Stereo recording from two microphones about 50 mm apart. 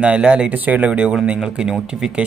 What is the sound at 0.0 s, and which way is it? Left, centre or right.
Speech, right.